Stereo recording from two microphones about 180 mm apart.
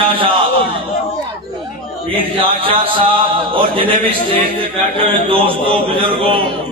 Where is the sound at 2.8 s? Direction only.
30° right (ahead or behind).